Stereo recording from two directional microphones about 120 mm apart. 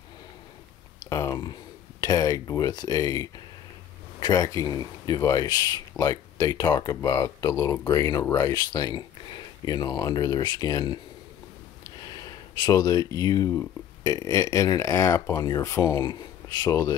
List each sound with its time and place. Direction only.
1.0 s a sound: 25° left (ahead or behind)
1.4 s speech: 35° left (ahead or behind)
12.0 s speech: 35° left (ahead or behind)
16.0 s speech: 35° left (ahead or behind)